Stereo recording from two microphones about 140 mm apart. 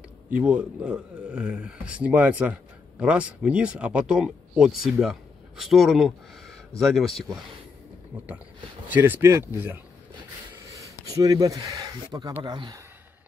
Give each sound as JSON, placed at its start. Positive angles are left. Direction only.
{"t": 0.3, "sound": "speech", "side_deg": -10}
{"t": 8.9, "sound": "speech", "side_deg": -15}